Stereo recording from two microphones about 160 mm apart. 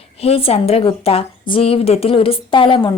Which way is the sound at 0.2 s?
40° left (ahead or behind).